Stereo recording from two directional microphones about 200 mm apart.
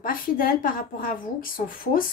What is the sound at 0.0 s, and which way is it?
Speech, 45° left (ahead or behind).